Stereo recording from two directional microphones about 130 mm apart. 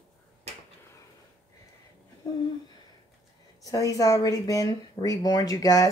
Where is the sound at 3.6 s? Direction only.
25° left (ahead or behind).